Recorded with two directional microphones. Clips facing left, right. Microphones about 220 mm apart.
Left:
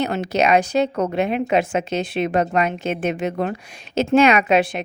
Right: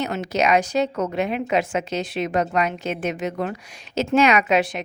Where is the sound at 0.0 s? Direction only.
30° left (ahead or behind).